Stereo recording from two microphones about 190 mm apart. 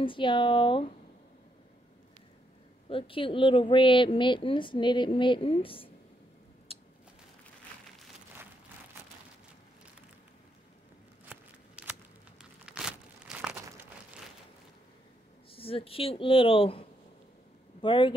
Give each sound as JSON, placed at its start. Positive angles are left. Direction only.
{"t": 0.0, "sound": "speech", "side_deg": 25}
{"t": 2.9, "sound": "speech", "side_deg": 30}
{"t": 11.2, "sound": "scissors", "side_deg": -10}
{"t": 12.4, "sound": "a sound", "side_deg": -5}
{"t": 15.5, "sound": "speech", "side_deg": 30}
{"t": 17.8, "sound": "speech", "side_deg": 25}